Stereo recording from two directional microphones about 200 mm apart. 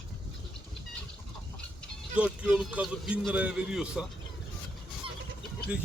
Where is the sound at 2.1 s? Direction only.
5° right (ahead or behind).